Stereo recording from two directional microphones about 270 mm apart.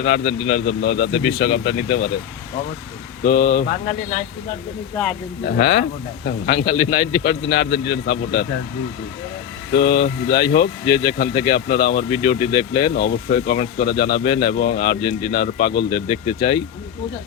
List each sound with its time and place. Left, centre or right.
0.0 s speech: left
3.2 s speech: left
5.5 s speech: left
9.7 s speech: left
12.1 s speech: left